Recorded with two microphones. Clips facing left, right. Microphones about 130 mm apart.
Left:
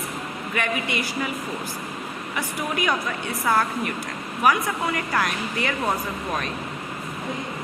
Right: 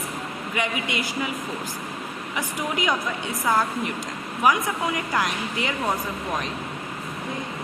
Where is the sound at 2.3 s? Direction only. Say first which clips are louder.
Even; 15° right (ahead or behind).